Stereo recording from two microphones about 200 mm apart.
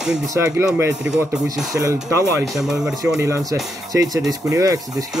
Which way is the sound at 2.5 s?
Centre (ahead or behind).